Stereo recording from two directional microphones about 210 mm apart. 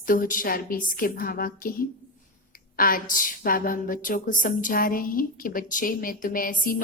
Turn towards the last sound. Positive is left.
turn(degrees=40)  # may be behind; listen again after turning